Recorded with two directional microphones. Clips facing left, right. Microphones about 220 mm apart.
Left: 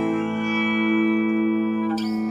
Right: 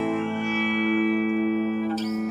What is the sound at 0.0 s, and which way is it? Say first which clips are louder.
Music: left 3 dB; 45° left (ahead or behind).